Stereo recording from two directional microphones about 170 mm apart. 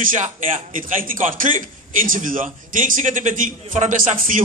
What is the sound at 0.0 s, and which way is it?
A man's voice, 50° right (ahead or behind).